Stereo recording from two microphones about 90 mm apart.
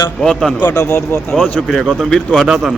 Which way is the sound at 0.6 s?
45° left (ahead or behind).